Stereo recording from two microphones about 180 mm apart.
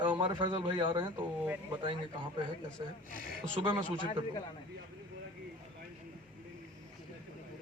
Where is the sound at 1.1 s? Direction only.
10° right (ahead or behind).